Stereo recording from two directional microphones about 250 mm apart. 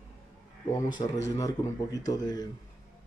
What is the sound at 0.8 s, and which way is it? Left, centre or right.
Speech, centre.